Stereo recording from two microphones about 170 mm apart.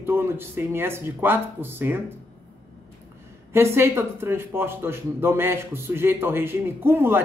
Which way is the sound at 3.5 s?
15° right (ahead or behind).